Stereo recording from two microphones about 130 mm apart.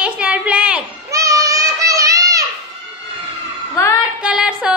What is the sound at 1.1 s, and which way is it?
Children playing, 25° right (ahead or behind).